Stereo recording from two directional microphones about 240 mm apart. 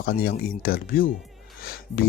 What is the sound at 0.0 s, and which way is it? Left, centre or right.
Speech, left.